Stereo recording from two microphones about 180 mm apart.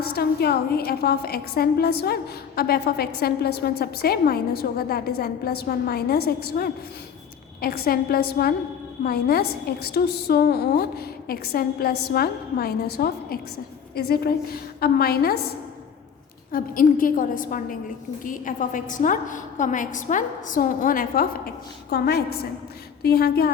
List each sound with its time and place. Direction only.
0.0 s a woman's voice: 60° left (ahead or behind)
16.5 s a woman's voice: 50° left (ahead or behind)